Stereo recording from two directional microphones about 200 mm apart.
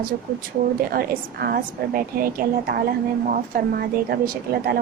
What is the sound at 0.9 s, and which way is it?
A woman's voice, 50° right (ahead or behind).